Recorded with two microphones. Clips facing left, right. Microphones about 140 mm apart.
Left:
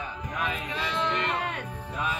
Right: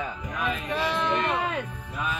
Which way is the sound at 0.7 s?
60° right (ahead or behind).